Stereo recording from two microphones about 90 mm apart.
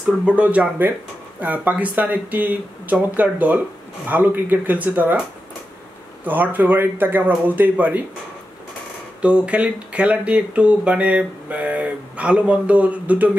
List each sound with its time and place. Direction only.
0.4 s speech: 15° right (ahead or behind)
6.2 s speech: 20° right (ahead or behind)
9.2 s speech: 15° right (ahead or behind)